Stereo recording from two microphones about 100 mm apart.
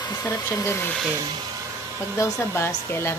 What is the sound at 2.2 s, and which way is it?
Speech, 30° left (ahead or behind).